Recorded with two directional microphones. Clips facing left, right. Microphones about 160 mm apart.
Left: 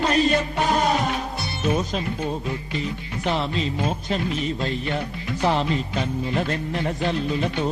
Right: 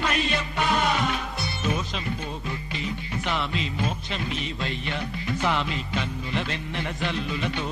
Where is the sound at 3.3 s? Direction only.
35° left (ahead or behind).